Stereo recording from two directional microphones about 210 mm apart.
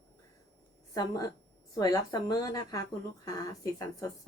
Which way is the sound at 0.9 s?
20° left (ahead or behind).